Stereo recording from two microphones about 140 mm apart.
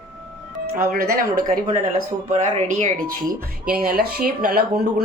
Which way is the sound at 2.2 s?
60° right (ahead or behind).